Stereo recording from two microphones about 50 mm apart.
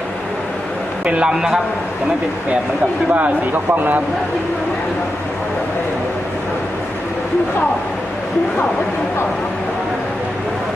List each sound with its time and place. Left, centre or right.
1.0 s a man's voice: right
3.1 s speech: right